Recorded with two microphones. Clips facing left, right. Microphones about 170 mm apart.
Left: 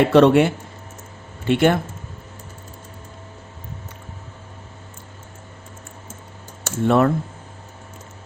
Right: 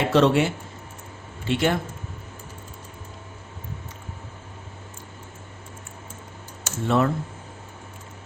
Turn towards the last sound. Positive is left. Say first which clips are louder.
# left 5 dB
turn(degrees=55)  # may be behind; listen again after turning